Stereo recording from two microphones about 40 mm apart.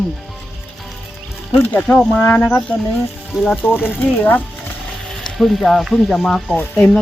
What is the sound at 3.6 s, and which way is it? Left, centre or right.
Speech, left.